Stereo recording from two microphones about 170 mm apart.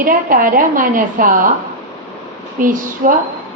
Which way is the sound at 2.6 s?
50° right (ahead or behind).